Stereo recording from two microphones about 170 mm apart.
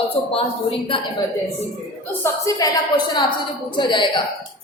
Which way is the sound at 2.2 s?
20° left (ahead or behind).